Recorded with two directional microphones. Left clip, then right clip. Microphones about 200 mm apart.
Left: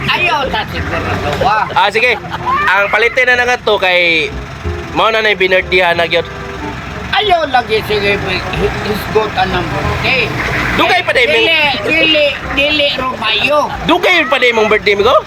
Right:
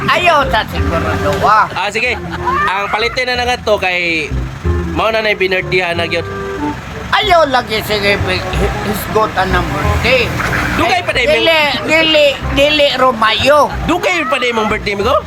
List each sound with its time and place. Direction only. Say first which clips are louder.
0.1 s speech: right 3 dB; 10° right (ahead or behind)
7.7 s speech: left 1 dB; 40° right (ahead or behind)
10.8 s speech: left 4 dB; 10° right (ahead or behind)
11.9 s speech: even; 40° right (ahead or behind)
12.1 s speech: right 1 dB; 10° right (ahead or behind)